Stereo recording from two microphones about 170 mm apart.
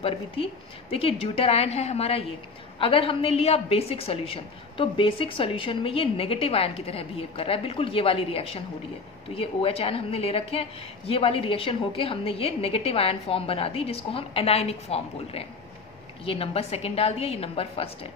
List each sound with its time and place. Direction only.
0.0 s a woman's voice: 35° left (ahead or behind)